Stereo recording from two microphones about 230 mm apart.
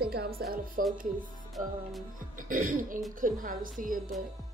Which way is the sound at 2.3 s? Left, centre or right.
Right.